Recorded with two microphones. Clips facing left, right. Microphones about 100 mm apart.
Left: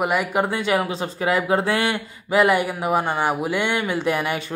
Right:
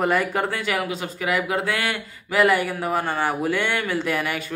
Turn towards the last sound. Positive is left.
turn(degrees=25)  # may be behind; listen again after turning